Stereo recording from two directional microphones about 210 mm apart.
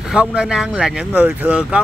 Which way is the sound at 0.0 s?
5° right (ahead or behind).